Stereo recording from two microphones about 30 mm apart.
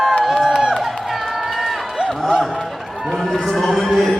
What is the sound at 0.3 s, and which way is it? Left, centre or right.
Crowd, centre.